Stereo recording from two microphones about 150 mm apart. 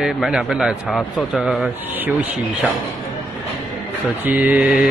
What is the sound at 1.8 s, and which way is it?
Speech, 10° right (ahead or behind).